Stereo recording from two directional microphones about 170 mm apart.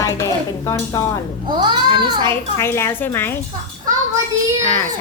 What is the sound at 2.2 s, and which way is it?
Speech, 15° left (ahead or behind).